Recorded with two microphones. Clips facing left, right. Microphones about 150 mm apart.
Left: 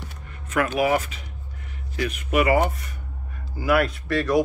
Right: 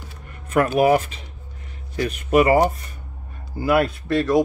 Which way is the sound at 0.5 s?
45° right (ahead or behind).